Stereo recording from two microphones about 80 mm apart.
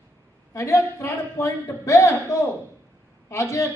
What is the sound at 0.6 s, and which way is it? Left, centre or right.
Speech, left.